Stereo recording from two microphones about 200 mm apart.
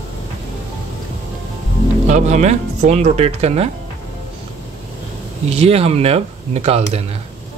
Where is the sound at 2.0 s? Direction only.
35° right (ahead or behind).